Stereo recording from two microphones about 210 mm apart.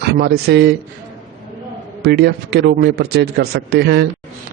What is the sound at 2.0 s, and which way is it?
Speech, 50° right (ahead or behind).